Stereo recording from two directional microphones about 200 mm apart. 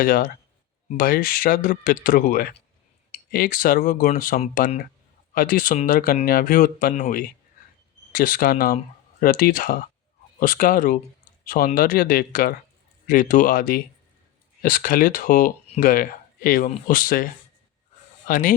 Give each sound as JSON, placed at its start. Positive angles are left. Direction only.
{"t": 0.0, "sound": "speech", "side_deg": 45}
{"t": 18.3, "sound": "speech", "side_deg": 40}